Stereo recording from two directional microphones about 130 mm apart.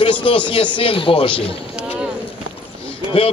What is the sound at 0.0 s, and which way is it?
A man's voice, 40° left (ahead or behind).